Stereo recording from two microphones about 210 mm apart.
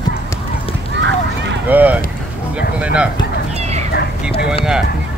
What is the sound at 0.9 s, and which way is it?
Run, 55° right (ahead or behind).